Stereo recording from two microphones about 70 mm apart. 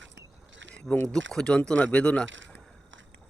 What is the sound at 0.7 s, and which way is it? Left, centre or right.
Speech, centre.